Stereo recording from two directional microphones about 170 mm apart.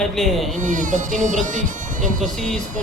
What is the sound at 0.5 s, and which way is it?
Speech, 50° right (ahead or behind).